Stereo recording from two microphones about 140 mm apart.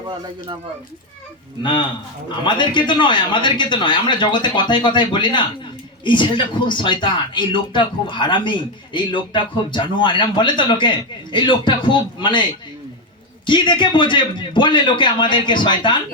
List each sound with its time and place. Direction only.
2.4 s speech: 35° left (ahead or behind)